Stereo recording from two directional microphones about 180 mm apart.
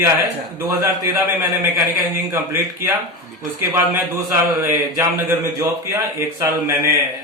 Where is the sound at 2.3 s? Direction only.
15° right (ahead or behind).